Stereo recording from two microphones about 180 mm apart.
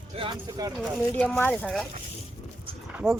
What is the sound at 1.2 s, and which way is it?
Speech, 10° left (ahead or behind).